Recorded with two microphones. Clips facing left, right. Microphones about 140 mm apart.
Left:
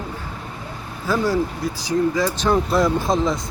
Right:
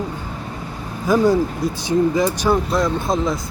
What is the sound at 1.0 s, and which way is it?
Speech, 15° right (ahead or behind).